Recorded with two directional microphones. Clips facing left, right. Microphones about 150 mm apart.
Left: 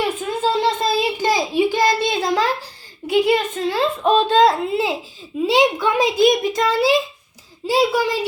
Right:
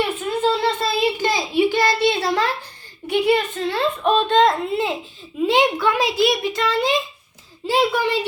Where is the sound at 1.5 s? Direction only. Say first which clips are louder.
Right 2 dB; 15° left (ahead or behind).